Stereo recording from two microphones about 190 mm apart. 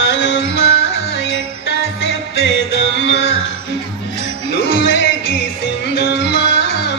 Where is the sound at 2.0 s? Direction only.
90° left.